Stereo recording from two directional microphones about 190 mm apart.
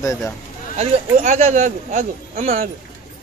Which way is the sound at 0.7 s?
35° right (ahead or behind).